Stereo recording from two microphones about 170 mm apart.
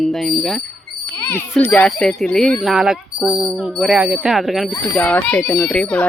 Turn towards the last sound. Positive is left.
turn(degrees=5)  # may be behind; listen again after turning